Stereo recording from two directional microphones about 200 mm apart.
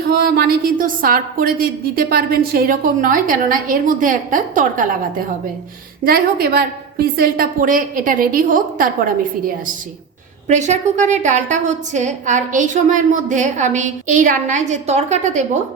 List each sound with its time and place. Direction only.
0.1 s a woman's voice: 50° right (ahead or behind)
6.1 s a woman's voice: 50° right (ahead or behind)